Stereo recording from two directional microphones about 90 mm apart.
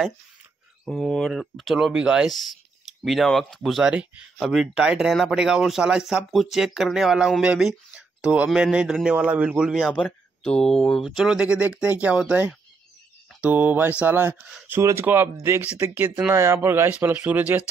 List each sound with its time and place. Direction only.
0.8 s speech: 5° left (ahead or behind)
3.8 s speech: 10° right (ahead or behind)
9.8 s speech: 10° left (ahead or behind); by 15.0 s 30° right (ahead or behind)
15.6 s speech: 20° right (ahead or behind)
17.1 s speech: 15° right (ahead or behind)